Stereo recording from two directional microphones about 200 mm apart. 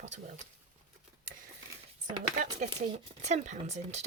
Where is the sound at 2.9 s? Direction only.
35° right (ahead or behind).